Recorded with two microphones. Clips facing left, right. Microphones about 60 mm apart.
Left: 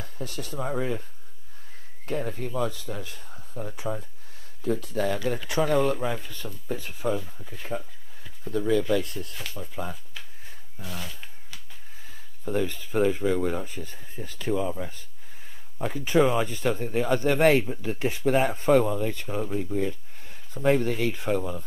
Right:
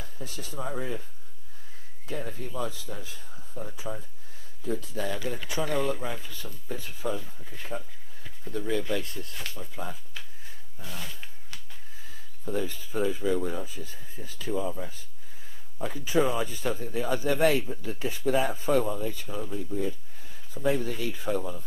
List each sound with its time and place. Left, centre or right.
0.0 s speech: left
2.0 s speech: left
7.2 s speech: centre
8.5 s speech: left
10.8 s speech: centre
12.1 s speech: left